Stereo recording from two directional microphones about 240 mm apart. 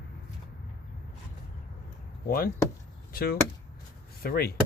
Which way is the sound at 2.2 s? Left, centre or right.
Left.